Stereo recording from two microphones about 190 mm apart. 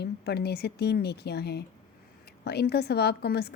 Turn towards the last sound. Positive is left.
turn(degrees=55)  # may be behind; listen again after turning